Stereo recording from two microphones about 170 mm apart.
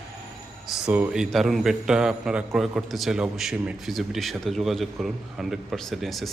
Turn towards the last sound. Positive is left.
turn(degrees=0)  # may be behind; listen again after turning